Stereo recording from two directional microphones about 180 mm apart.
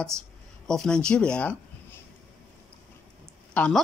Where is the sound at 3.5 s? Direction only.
10° left (ahead or behind).